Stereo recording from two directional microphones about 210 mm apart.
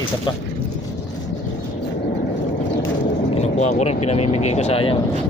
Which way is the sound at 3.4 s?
30° left (ahead or behind).